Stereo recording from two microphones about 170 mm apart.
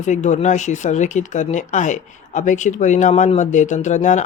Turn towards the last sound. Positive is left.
turn(degrees=45)  # may be behind; listen again after turning